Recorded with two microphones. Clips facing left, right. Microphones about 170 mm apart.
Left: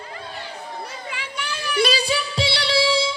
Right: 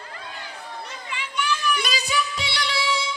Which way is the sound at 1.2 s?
30° left (ahead or behind).